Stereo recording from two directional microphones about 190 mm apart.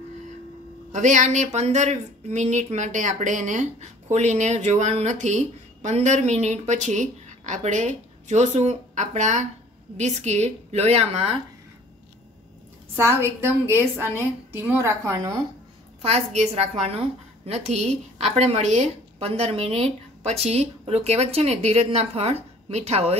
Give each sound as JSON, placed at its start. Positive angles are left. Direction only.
{"t": 0.9, "sound": "speech", "side_deg": -40}
{"t": 12.9, "sound": "a woman's voice", "side_deg": -15}
{"t": 16.3, "sound": "speech", "side_deg": -35}